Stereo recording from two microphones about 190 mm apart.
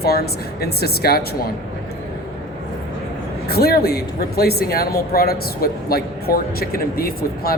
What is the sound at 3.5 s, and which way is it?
Speech, 55° left (ahead or behind).